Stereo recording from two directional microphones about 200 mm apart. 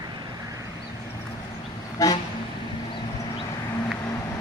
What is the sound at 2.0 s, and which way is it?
Vehicle, 15° left (ahead or behind).